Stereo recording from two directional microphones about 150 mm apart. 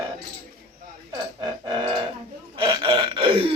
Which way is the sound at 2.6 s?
30° right (ahead or behind).